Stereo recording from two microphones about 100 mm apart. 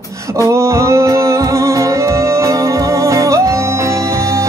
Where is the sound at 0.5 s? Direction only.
30° right (ahead or behind).